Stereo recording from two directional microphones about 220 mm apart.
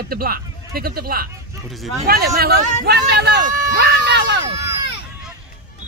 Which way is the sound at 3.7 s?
50° right (ahead or behind).